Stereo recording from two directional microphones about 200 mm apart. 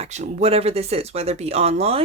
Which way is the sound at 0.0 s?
35° right (ahead or behind).